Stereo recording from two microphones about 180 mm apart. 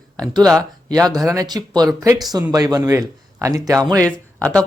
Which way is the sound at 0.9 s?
20° right (ahead or behind).